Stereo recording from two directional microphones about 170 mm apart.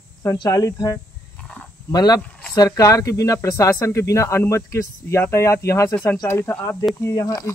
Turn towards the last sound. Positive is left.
turn(degrees=15)  # may be behind; listen again after turning